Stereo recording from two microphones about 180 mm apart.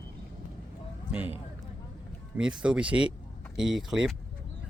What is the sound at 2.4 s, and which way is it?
Speech, 5° right (ahead or behind).